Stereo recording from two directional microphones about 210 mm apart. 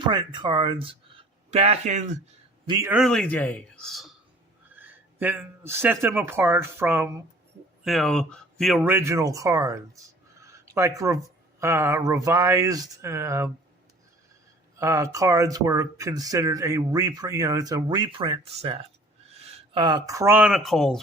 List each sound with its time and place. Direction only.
0.1 s speech: 20° right (ahead or behind)
2.6 s speech: 15° right (ahead or behind)
2.9 s speech: centre (ahead or behind)
7.9 s speech: centre (ahead or behind)
8.8 s speech: 10° right (ahead or behind)
14.8 s speech: 15° right (ahead or behind); by 21.0 s centre (ahead or behind)